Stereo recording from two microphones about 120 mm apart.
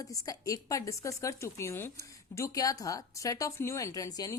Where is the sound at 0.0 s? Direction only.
30° left (ahead or behind).